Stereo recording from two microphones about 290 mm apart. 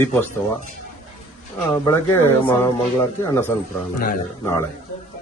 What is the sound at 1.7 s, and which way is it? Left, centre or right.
Speech, centre.